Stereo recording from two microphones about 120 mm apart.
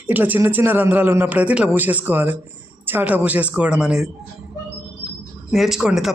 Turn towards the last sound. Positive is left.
turn(degrees=0)  # may be behind; listen again after turning